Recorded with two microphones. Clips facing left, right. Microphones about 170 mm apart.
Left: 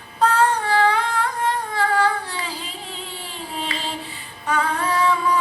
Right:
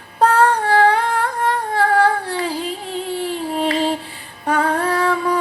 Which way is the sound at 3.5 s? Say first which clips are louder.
Right 10 dB; 50° right (ahead or behind).